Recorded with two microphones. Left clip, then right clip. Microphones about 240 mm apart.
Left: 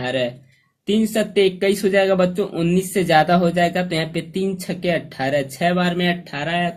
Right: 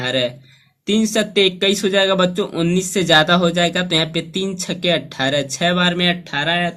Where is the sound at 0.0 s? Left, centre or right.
Centre.